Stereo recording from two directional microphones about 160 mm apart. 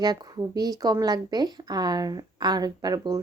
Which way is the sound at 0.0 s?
25° right (ahead or behind).